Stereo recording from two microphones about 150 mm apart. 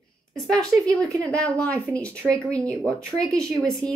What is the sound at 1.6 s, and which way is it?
Speech, 5° left (ahead or behind).